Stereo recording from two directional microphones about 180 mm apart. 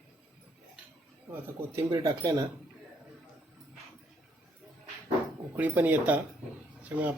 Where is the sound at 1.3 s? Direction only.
15° right (ahead or behind).